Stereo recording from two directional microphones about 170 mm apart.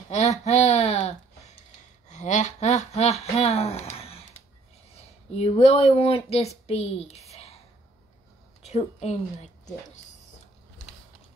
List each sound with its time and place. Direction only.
0.5 s a sound: 40° left (ahead or behind)
2.0 s speech: 45° left (ahead or behind)
5.4 s speech: 35° left (ahead or behind)
8.6 s a woman's voice: 40° left (ahead or behind)